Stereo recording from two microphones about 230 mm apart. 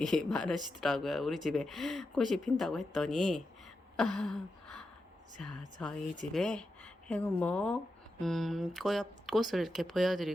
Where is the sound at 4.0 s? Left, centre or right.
Centre.